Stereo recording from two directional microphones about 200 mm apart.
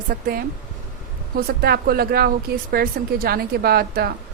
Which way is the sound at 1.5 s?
50° right (ahead or behind).